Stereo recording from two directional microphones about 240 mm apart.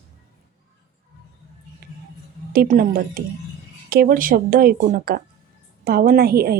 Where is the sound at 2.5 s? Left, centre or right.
Right.